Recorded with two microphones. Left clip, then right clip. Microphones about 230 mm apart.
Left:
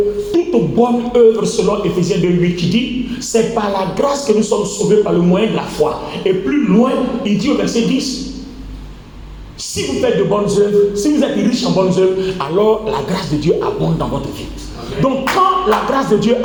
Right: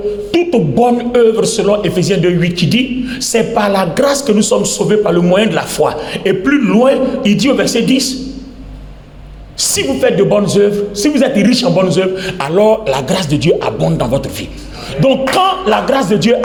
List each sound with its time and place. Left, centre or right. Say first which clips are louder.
0.3 s a man's voice: right 2 dB; right
9.6 s a man's voice: right 5 dB; right
15.0 s music: right 3 dB; right